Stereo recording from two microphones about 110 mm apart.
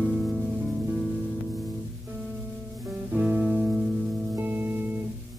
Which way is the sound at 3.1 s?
10° right (ahead or behind).